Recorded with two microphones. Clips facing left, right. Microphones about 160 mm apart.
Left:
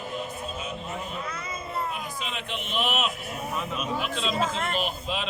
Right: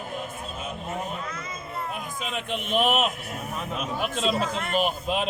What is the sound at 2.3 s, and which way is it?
Speech, 50° right (ahead or behind).